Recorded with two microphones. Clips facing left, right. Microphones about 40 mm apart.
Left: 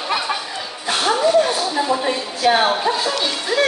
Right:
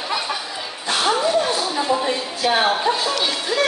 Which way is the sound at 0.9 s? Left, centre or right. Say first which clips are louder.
Left 2 dB; centre.